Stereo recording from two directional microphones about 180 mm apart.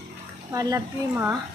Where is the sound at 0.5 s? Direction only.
20° right (ahead or behind).